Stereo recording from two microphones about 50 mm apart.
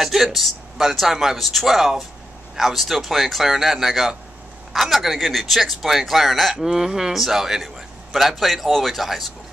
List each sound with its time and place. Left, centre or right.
0.0 s speech: centre